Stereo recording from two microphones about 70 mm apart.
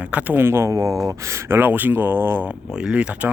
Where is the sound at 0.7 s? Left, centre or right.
Right.